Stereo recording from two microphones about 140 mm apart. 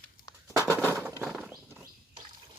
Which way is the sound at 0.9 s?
20° right (ahead or behind).